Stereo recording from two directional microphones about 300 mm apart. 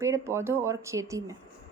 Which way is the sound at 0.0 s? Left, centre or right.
Centre.